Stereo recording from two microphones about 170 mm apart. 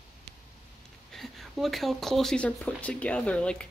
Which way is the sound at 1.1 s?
Centre (ahead or behind).